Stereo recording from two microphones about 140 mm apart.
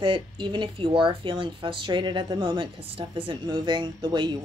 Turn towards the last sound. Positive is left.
turn(degrees=-30)  # may be behind; listen again after turning